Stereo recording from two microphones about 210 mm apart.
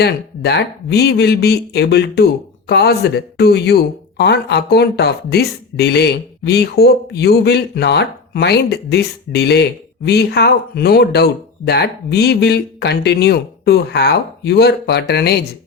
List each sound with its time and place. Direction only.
0.0 s speech: 50° left (ahead or behind)